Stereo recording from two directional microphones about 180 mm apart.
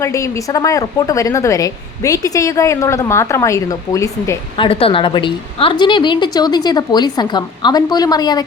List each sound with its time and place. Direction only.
0.0 s a woman's voice: 15° left (ahead or behind)